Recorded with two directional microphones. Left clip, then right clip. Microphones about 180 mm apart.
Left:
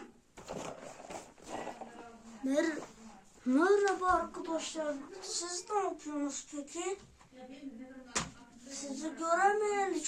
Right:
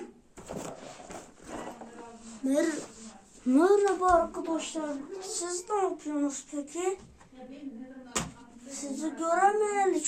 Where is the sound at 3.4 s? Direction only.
15° left (ahead or behind).